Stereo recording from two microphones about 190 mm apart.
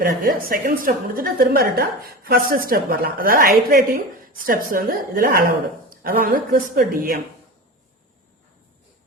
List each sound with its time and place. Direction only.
0.0 s a woman's voice: 50° right (ahead or behind)